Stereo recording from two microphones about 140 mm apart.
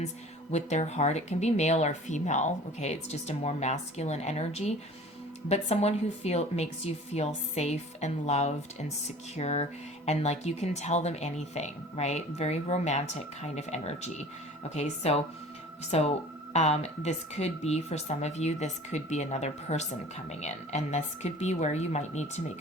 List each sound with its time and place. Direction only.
0.5 s a woman's voice: 55° left (ahead or behind)